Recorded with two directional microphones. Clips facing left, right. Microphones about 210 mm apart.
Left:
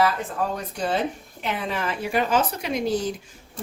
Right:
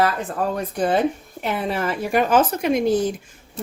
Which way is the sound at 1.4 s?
45° right (ahead or behind).